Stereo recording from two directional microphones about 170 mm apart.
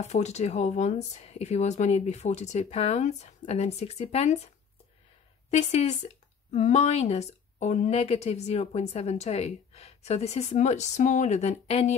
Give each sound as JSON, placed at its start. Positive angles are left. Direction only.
{"t": 0.0, "sound": "a woman's voice", "side_deg": 40}
{"t": 5.5, "sound": "a woman's voice", "side_deg": 40}